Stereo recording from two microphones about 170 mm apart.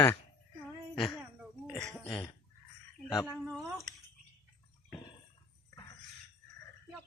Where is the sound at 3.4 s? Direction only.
Centre (ahead or behind).